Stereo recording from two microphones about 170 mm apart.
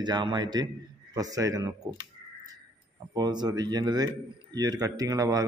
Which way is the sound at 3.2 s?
25° right (ahead or behind).